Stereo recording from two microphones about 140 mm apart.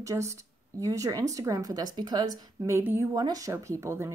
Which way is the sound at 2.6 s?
20° right (ahead or behind).